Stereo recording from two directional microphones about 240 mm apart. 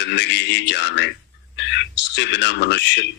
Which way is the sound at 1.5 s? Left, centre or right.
Left.